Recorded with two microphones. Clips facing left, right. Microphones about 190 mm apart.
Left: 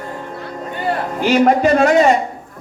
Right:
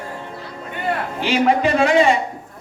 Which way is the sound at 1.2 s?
50° left (ahead or behind).